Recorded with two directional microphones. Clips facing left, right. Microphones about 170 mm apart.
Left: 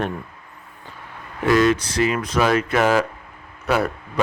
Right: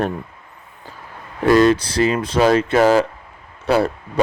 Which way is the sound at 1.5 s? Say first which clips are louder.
Right 4 dB; 35° right (ahead or behind).